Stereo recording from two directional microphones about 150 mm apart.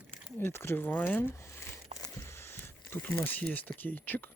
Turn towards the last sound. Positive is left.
turn(degrees=15)  # may be behind; listen again after turning